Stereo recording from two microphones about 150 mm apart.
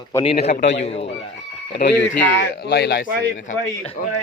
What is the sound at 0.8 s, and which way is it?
Speech, 40° left (ahead or behind).